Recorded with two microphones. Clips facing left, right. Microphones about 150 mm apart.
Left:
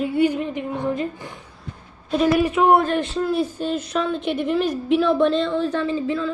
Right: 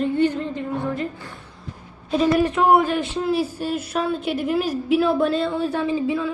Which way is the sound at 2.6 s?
5° right (ahead or behind).